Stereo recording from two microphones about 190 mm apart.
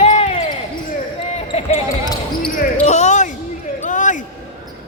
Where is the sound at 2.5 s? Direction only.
40° left (ahead or behind).